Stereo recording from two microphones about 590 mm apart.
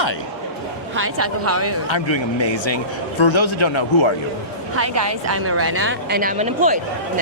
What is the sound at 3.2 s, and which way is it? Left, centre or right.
Speech, left.